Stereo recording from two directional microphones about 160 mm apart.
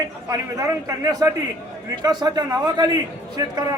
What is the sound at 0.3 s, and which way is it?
A man's voice, 20° right (ahead or behind).